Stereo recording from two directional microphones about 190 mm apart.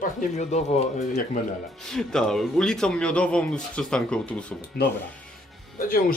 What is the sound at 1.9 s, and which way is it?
Speech, 5° left (ahead or behind).